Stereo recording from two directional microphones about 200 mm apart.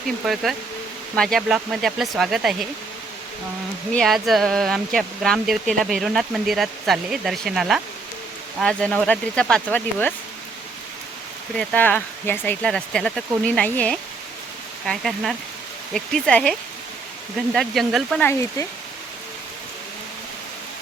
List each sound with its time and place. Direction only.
1.1 s speech: centre (ahead or behind)
3.9 s speech: centre (ahead or behind)
11.5 s speech: 5° left (ahead or behind)
18.3 s speech: 15° left (ahead or behind)